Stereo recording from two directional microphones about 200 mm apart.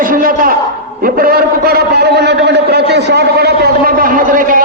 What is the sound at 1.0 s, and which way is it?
A man's voice, 45° right (ahead or behind).